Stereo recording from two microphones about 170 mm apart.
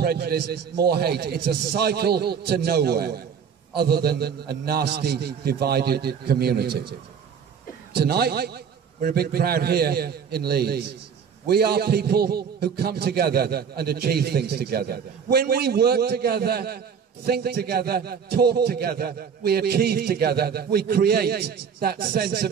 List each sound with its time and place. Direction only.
0.0 s a man's voice: 65° right (ahead or behind)
7.9 s a man's voice: 70° right (ahead or behind)